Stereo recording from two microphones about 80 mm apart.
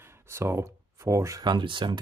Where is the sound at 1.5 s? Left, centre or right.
Right.